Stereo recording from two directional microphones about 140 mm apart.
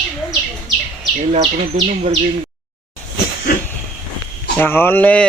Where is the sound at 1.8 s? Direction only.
55° right (ahead or behind).